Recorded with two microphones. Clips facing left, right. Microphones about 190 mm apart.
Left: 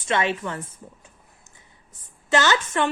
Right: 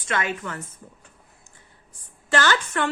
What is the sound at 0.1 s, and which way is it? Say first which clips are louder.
Speech: left 3 dB; 25° left (ahead or behind).